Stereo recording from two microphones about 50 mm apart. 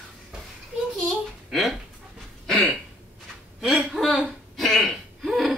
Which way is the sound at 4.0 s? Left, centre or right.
Right.